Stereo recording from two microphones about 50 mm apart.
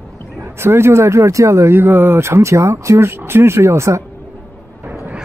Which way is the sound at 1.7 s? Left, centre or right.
Right.